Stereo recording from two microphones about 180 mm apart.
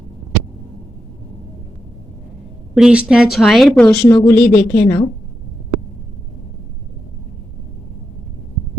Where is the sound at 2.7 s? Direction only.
5° right (ahead or behind).